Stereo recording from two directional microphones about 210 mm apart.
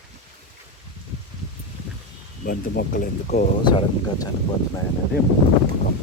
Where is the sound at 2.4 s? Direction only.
45° left (ahead or behind).